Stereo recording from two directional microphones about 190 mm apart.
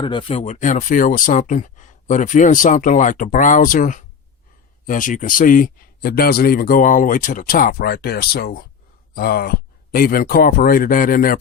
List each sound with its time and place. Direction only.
0.0 s speech: 25° left (ahead or behind); by 11.3 s 45° left (ahead or behind)